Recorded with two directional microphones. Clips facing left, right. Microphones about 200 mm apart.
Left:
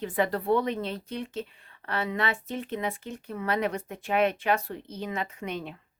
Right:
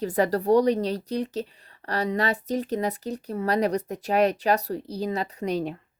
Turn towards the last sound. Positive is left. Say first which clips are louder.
# right 7 dB
turn(degrees=-40)  # may be behind; listen again after turning